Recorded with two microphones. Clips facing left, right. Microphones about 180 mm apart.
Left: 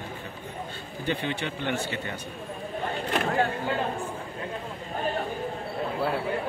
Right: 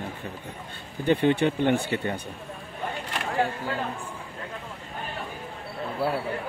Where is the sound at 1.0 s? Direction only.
55° right (ahead or behind).